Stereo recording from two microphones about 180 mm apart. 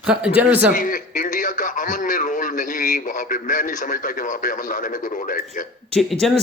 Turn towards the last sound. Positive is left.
turn(degrees=0)  # may be behind; listen again after turning